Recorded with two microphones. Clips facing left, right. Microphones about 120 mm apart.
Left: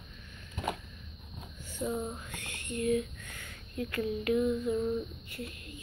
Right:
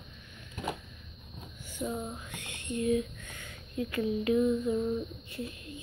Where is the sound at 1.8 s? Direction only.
5° right (ahead or behind).